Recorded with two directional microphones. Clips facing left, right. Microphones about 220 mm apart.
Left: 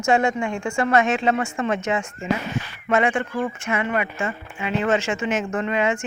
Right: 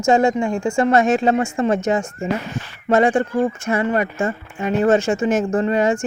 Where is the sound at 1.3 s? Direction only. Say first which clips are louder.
Right 5 dB; 30° right (ahead or behind).